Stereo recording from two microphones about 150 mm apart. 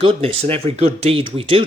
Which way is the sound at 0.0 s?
40° right (ahead or behind).